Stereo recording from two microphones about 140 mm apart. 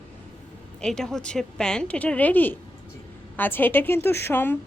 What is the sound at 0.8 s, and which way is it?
A woman's voice, 5° left (ahead or behind).